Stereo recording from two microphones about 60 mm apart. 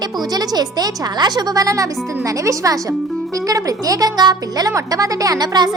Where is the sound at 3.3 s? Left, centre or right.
Right.